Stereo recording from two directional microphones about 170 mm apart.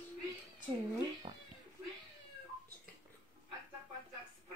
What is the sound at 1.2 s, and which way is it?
Cat, 30° right (ahead or behind).